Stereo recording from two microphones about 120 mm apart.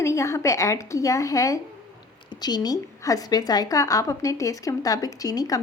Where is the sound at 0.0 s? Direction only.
25° left (ahead or behind).